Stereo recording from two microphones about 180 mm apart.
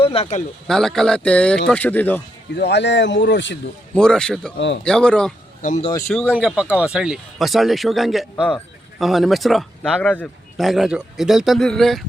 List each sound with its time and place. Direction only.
0.0 s speech: 35° left (ahead or behind)
0.7 s speech: 5° left (ahead or behind)
2.6 s speech: 70° left (ahead or behind)
3.9 s speech: 5° left (ahead or behind)
4.5 s speech: 75° left (ahead or behind)
4.8 s speech: 5° left (ahead or behind)
5.6 s speech: 50° left (ahead or behind)
6.1 s speech: 5° right (ahead or behind)